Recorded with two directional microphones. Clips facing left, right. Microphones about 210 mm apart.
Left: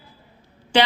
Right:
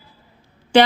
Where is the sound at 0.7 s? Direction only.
45° right (ahead or behind).